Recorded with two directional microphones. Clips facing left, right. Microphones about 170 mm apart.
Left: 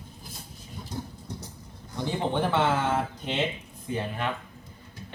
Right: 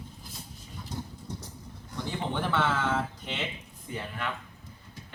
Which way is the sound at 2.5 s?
20° left (ahead or behind).